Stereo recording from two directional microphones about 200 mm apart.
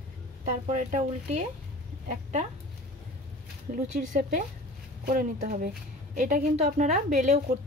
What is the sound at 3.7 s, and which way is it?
A woman's voice, 40° right (ahead or behind).